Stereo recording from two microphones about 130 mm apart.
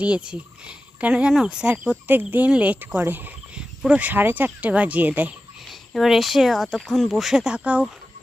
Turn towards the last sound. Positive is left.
turn(degrees=-10)  # may be behind; listen again after turning